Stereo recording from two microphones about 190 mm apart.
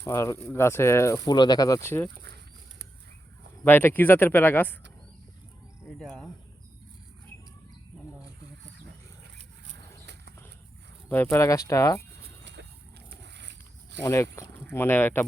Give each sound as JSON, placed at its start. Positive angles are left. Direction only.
{"t": 0.0, "sound": "speech", "side_deg": 15}
{"t": 3.6, "sound": "speech", "side_deg": 10}
{"t": 5.8, "sound": "speech", "side_deg": 0}
{"t": 9.7, "sound": "a sound", "side_deg": -65}
{"t": 11.1, "sound": "speech", "side_deg": 10}
{"t": 12.5, "sound": "a sound", "side_deg": -70}
{"t": 14.0, "sound": "speech", "side_deg": 15}